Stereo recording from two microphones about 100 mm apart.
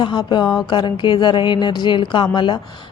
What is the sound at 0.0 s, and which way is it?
Speech, 50° left (ahead or behind).